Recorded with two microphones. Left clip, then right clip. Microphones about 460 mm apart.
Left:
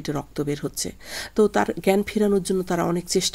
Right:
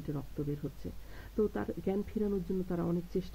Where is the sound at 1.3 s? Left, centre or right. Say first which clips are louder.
Left 14 dB; centre.